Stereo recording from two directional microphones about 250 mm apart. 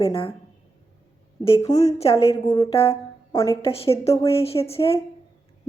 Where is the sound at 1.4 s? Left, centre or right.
Left.